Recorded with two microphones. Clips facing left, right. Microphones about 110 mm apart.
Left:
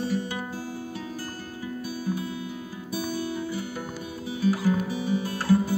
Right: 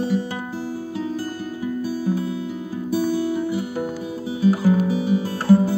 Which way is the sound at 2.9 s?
30° right (ahead or behind).